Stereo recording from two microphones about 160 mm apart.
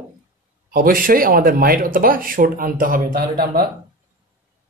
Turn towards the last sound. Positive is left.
turn(degrees=-70)  # may be behind; listen again after turning